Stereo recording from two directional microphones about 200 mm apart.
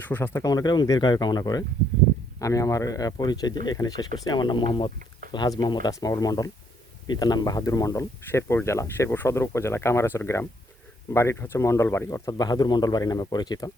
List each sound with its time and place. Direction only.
0.0 s speech: 10° left (ahead or behind)